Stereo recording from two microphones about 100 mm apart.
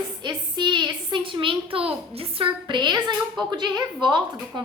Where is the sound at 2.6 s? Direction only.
50° right (ahead or behind).